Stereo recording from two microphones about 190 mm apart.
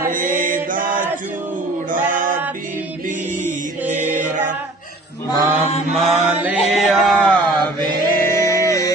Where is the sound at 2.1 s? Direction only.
45° right (ahead or behind).